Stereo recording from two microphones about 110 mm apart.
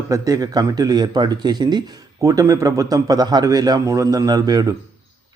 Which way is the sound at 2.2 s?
30° right (ahead or behind).